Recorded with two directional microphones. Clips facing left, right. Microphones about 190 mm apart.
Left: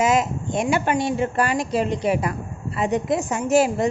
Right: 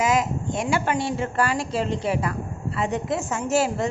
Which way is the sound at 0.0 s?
25° left (ahead or behind).